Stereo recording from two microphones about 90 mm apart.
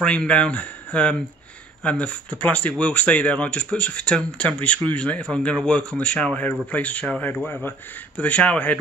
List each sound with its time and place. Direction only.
0.0 s speech: 15° left (ahead or behind)